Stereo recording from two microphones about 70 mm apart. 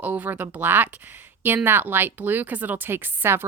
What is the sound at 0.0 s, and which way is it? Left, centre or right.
Speech, right.